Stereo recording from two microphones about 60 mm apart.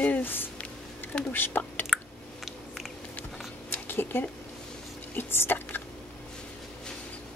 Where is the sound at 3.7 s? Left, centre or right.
Left.